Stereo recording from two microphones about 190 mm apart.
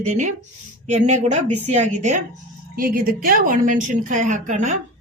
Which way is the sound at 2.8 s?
50° right (ahead or behind).